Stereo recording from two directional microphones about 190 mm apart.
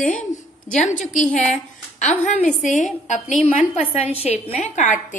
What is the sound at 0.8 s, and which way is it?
A woman's voice, 40° left (ahead or behind).